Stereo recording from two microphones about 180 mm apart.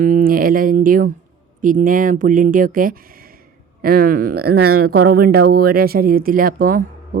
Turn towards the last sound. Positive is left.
turn(degrees=-55)  # may be behind; listen again after turning